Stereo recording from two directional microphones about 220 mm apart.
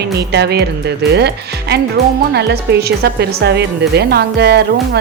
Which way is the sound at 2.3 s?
50° right (ahead or behind).